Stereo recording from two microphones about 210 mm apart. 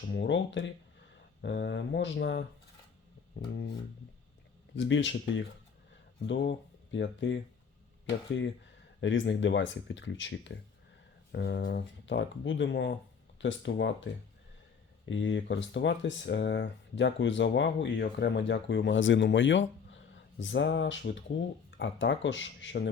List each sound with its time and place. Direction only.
0.1 s speech: 55° left (ahead or behind)
4.7 s speech: 60° left (ahead or behind)
9.0 s speech: 60° left (ahead or behind)